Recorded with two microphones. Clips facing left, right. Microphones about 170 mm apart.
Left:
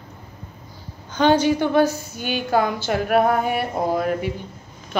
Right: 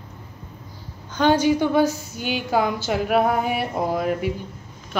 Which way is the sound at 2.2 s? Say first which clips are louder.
Left 1 dB; 50° left (ahead or behind).